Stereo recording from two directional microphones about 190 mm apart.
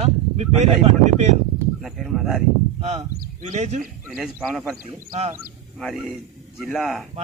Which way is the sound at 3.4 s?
35° right (ahead or behind).